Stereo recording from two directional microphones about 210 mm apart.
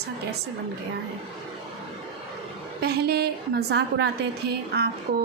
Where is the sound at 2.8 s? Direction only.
50° right (ahead or behind).